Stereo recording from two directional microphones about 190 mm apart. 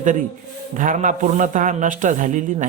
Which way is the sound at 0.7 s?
40° right (ahead or behind).